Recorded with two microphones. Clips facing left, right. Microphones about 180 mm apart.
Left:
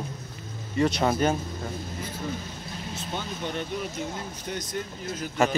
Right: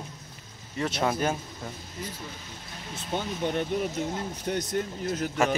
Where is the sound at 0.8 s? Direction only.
5° right (ahead or behind).